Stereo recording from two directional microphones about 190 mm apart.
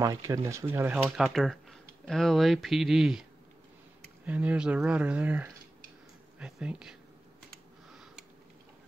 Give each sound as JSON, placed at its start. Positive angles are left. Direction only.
{"t": 0.0, "sound": "speech", "side_deg": -20}
{"t": 4.3, "sound": "speech", "side_deg": -5}
{"t": 7.9, "sound": "a sound", "side_deg": 0}